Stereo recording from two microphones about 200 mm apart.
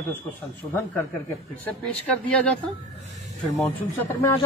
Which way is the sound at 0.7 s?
10° left (ahead or behind).